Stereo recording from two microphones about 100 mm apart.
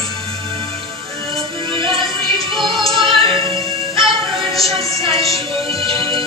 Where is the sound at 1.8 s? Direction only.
60° right (ahead or behind).